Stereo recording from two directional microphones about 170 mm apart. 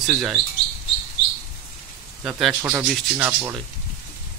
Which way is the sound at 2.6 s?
15° right (ahead or behind).